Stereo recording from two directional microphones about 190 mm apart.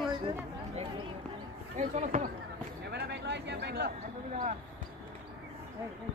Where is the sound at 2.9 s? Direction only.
60° right (ahead or behind).